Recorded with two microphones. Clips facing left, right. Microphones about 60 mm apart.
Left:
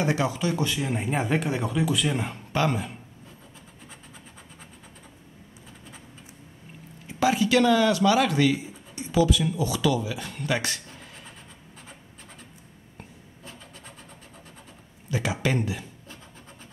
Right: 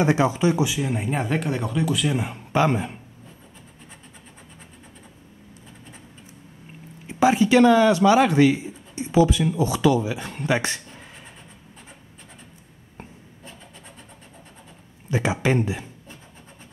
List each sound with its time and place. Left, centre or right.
0.0 s speech: right
0.7 s speech: centre
2.3 s speech: right
7.1 s speech: right
15.0 s speech: right
15.4 s a sound: right